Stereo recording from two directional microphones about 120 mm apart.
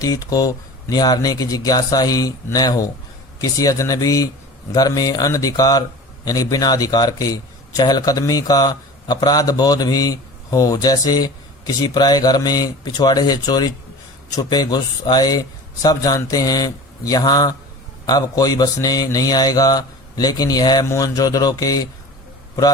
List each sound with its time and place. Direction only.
0.0 s speech: 30° left (ahead or behind)